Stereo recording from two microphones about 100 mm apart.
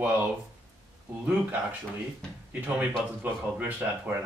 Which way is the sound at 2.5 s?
15° right (ahead or behind).